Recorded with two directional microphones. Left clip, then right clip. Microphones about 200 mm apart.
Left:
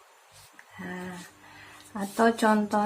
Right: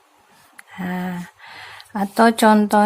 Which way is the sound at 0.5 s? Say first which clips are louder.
Right 10 dB; 55° right (ahead or behind).